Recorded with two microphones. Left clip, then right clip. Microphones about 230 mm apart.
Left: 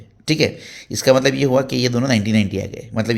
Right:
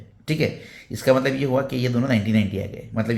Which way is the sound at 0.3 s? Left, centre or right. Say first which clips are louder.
Left 6 dB; left.